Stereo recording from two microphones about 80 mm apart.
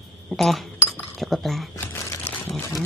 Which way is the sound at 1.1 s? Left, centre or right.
Centre.